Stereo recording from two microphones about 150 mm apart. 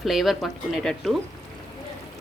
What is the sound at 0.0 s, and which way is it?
Speech, centre (ahead or behind).